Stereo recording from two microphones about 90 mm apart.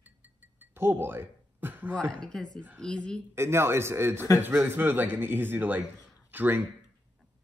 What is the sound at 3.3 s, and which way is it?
A man's voice, 30° right (ahead or behind).